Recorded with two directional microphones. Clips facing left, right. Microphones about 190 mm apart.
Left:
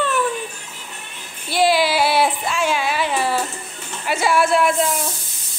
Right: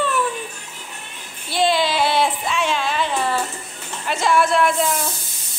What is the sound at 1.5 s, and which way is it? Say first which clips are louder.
Speech: left 2 dB; 5° left (ahead or behind).